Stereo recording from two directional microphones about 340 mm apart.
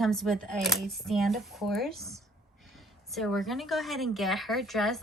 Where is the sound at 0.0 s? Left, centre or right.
Centre.